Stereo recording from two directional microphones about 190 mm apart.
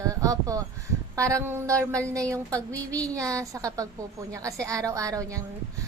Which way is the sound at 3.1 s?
15° right (ahead or behind).